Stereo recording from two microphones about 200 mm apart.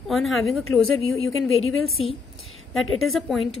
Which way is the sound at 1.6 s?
90° left.